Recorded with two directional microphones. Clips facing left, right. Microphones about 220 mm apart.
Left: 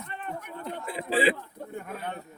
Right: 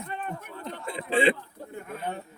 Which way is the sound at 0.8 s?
5° left (ahead or behind).